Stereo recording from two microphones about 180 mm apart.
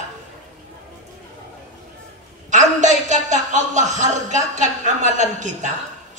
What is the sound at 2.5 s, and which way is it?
Speech, 40° right (ahead or behind).